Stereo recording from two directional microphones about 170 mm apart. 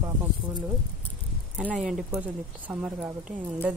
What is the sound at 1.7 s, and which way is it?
Speech, 5° right (ahead or behind).